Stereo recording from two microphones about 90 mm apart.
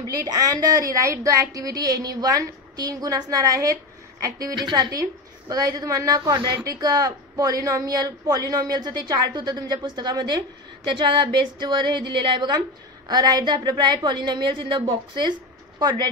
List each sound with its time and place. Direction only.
0.0 s a woman's voice: 40° right (ahead or behind)
4.6 s a woman's voice: 55° right (ahead or behind)
13.1 s a woman's voice: 50° right (ahead or behind)